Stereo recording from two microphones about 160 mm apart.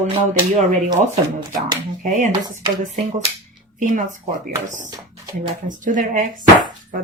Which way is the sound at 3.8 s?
55° right (ahead or behind).